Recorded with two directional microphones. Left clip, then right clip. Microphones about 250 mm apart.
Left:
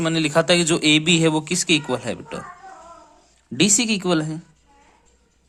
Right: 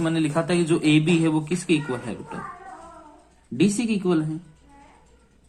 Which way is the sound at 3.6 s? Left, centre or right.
Left.